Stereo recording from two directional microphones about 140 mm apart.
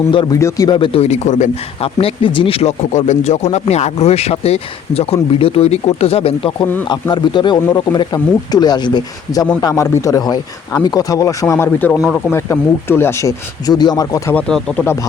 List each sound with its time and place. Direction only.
0.1 s speech: 35° left (ahead or behind)
0.3 s speech: 20° left (ahead or behind)
0.8 s speech: 45° left (ahead or behind)
2.0 s speech: 40° left (ahead or behind)
14.3 s speech: 5° left (ahead or behind)